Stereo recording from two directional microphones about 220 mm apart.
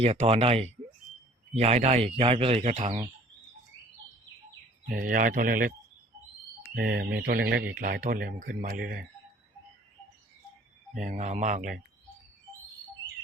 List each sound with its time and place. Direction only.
0.0 s speech: 30° right (ahead or behind)
4.9 s speech: 40° right (ahead or behind)
6.7 s speech: 45° right (ahead or behind)
10.9 s speech: 35° right (ahead or behind)